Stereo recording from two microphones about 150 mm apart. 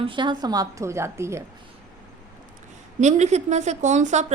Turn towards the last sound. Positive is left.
turn(degrees=-50)  # may be behind; listen again after turning